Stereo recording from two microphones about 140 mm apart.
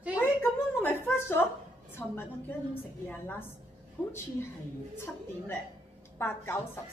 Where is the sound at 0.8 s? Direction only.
15° left (ahead or behind).